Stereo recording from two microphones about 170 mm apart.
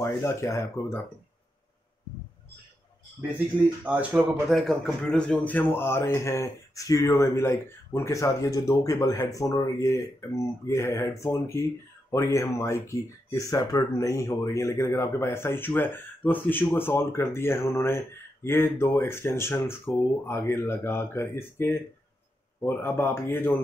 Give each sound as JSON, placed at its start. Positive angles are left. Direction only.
{"t": 0.0, "sound": "speech", "side_deg": 15}
{"t": 3.8, "sound": "speech", "side_deg": -10}